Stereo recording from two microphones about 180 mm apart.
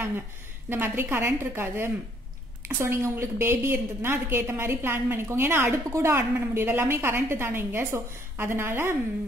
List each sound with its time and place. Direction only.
0.7 s a woman's voice: 10° right (ahead or behind)